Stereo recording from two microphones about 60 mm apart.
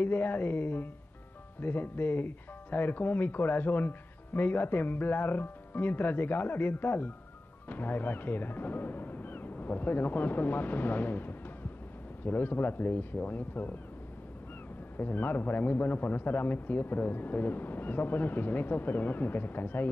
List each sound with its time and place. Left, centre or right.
0.0 s speech: left
15.0 s speech: left